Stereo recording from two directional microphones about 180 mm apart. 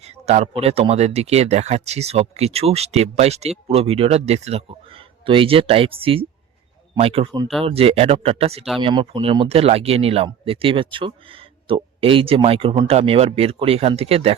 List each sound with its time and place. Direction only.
0.0 s speech: 35° right (ahead or behind)